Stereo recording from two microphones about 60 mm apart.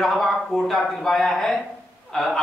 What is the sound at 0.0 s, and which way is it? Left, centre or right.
A man's voice, centre.